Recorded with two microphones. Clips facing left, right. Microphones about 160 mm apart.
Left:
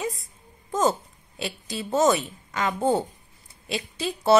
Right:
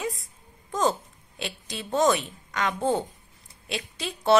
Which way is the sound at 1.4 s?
5° left (ahead or behind).